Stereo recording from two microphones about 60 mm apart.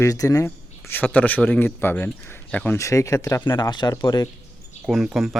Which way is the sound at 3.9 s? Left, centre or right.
Left.